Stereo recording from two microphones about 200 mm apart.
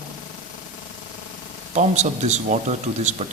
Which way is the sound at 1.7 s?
35° right (ahead or behind).